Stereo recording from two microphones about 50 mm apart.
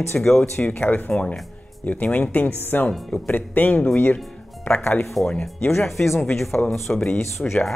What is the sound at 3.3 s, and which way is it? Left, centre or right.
Speech, left.